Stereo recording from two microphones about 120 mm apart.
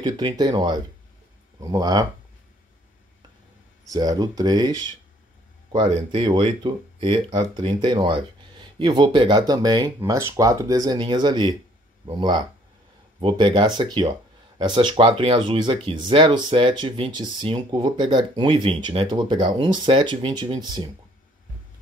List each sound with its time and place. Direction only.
0.0 s speech: 40° right (ahead or behind)
3.8 s speech: 30° right (ahead or behind)
5.9 s speech: 55° right (ahead or behind); by 20.9 s 35° right (ahead or behind)